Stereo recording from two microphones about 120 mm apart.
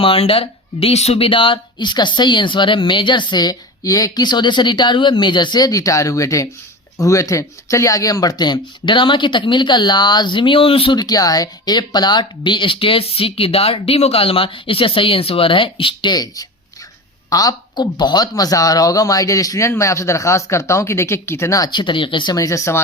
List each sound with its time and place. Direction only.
0.0 s speech: 50° left (ahead or behind)
10.9 s speech: 35° left (ahead or behind)
22.4 s speech: 25° left (ahead or behind)